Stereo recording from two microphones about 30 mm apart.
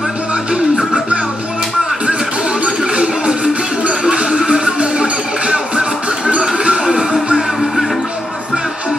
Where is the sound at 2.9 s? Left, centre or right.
Right.